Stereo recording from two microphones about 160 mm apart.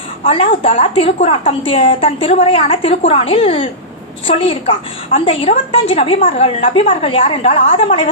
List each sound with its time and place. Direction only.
0.3 s a woman's voice: 35° left (ahead or behind)